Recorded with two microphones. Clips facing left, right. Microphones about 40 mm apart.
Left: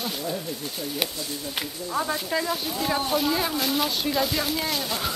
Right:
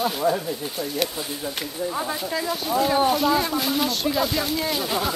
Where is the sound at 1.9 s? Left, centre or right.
Centre.